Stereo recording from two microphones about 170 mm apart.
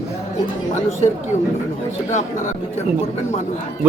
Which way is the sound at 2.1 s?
45° left (ahead or behind).